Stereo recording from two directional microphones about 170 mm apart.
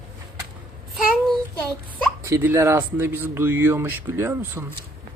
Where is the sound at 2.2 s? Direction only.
15° right (ahead or behind).